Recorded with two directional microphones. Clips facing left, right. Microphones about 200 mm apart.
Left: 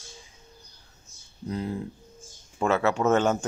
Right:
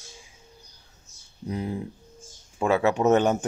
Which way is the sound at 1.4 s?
15° right (ahead or behind).